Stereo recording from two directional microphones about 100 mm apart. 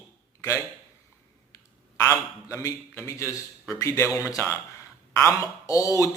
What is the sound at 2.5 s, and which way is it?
Speech, 30° left (ahead or behind).